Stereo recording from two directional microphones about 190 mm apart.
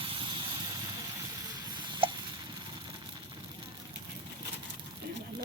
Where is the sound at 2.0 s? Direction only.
25° right (ahead or behind).